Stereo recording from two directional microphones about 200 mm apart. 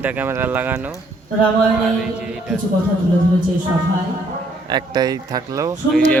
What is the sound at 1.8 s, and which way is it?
Speech, 5° right (ahead or behind).